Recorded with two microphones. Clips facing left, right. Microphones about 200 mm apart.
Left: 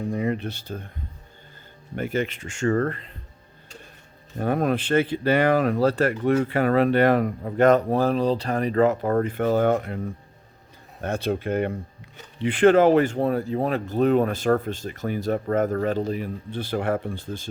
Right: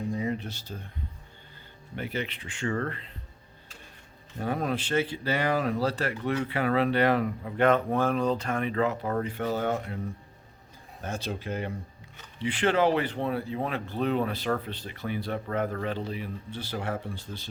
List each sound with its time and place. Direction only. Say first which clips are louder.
0.1 s a sound: left 5 dB; 60° left (ahead or behind)
2.0 s speech: left 7 dB; 45° left (ahead or behind)
4.4 s speech: left 6 dB; 55° left (ahead or behind)
11.0 s speech: left 8 dB; 60° left (ahead or behind)